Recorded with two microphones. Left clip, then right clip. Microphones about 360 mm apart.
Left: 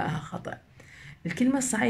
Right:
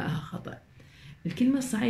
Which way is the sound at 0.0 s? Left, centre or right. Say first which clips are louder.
Left 4 dB; centre.